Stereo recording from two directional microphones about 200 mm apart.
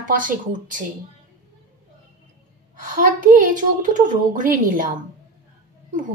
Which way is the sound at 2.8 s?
45° right (ahead or behind).